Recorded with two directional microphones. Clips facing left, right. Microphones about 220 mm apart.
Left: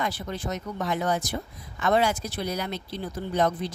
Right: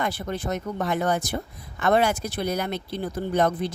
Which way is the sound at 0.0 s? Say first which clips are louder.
Right 3 dB; 55° right (ahead or behind).